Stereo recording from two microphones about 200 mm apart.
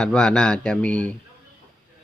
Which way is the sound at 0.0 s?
5° left (ahead or behind).